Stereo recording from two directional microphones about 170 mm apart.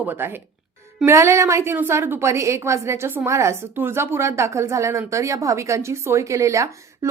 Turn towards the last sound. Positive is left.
turn(degrees=-20)  # may be behind; listen again after turning